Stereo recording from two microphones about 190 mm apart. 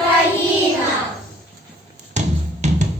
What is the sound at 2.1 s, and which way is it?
Music, 40° right (ahead or behind).